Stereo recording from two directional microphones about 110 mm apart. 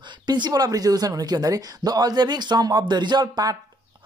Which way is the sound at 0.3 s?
35° right (ahead or behind).